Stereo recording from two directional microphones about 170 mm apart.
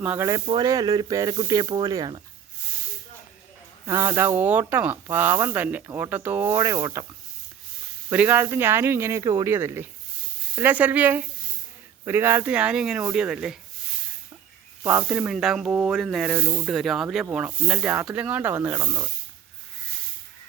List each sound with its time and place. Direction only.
0.0 s speech: 10° right (ahead or behind)
0.4 s speech: 25° right (ahead or behind)
3.8 s speech: 15° right (ahead or behind)
8.1 s speech: 10° right (ahead or behind)
14.8 s speech: 10° right (ahead or behind)